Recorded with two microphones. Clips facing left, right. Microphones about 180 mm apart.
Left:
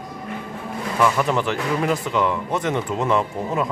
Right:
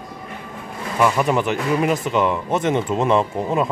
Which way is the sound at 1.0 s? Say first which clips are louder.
Right 2 dB; 15° right (ahead or behind).